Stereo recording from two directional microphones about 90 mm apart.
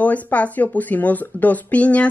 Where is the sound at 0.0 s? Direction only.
15° left (ahead or behind).